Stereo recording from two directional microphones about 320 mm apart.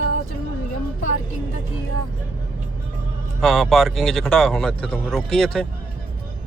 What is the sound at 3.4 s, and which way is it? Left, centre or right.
Speech, centre.